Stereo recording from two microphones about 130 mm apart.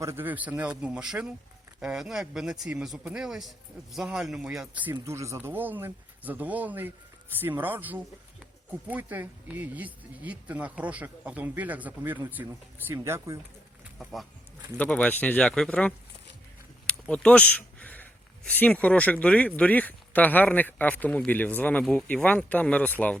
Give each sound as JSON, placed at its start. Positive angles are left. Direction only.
{"t": 0.0, "sound": "a man's voice", "side_deg": -20}
{"t": 5.0, "sound": "speech", "side_deg": -20}
{"t": 14.0, "sound": "a man's voice", "side_deg": 0}
{"t": 14.8, "sound": "speech", "side_deg": 10}